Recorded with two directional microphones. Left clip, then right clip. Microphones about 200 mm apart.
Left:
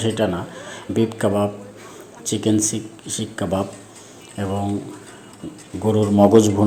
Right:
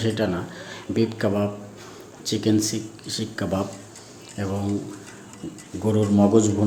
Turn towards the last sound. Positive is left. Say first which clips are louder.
# left 6 dB
turn(degrees=20)  # may be behind; listen again after turning